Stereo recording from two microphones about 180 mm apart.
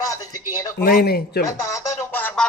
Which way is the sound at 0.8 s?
60° left (ahead or behind).